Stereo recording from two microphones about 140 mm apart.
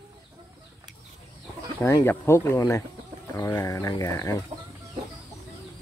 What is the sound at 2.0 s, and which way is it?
Speech, 20° left (ahead or behind).